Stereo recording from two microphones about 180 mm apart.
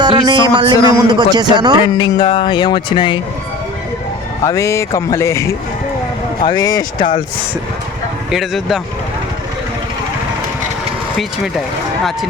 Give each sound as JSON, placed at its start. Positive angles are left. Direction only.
{"t": 0.0, "sound": "a sound", "side_deg": -25}
{"t": 1.0, "sound": "a man's voice", "side_deg": -25}
{"t": 2.0, "sound": "speech", "side_deg": 25}
{"t": 4.4, "sound": "speech", "side_deg": 15}
{"t": 8.3, "sound": "speech", "side_deg": 0}